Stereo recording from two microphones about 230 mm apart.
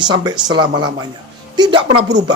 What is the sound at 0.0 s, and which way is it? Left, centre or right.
Speech, centre.